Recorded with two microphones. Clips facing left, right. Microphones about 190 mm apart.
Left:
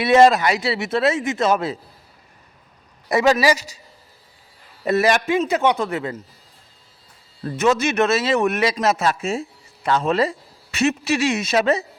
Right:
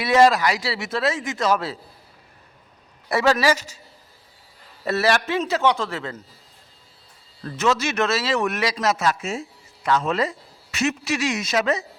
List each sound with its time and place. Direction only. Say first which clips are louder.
0.0 s a man's voice: left 3 dB; 25° left (ahead or behind)
3.1 s a man's voice: left 3 dB; 15° left (ahead or behind)
4.9 s a man's voice: left 3 dB; 15° left (ahead or behind)
7.4 s a man's voice: left 4 dB; 20° left (ahead or behind)